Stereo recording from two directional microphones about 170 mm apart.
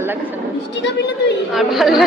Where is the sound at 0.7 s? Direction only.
90° left.